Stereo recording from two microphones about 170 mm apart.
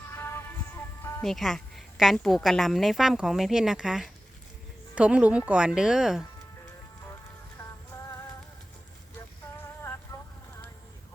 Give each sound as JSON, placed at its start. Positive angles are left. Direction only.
{"t": 0.1, "sound": "music", "side_deg": 15}
{"t": 1.2, "sound": "a woman's voice", "side_deg": 0}
{"t": 10.1, "sound": "vehicle", "side_deg": 20}